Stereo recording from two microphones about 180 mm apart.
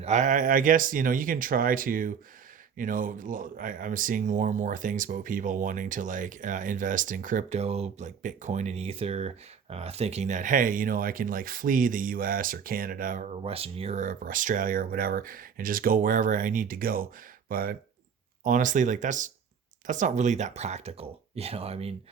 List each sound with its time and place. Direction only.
0.0 s speech: 40° right (ahead or behind)